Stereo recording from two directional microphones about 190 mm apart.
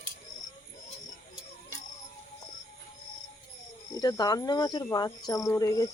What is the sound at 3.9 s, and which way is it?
Speech, 20° left (ahead or behind).